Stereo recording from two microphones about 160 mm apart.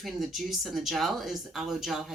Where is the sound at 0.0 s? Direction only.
Centre (ahead or behind).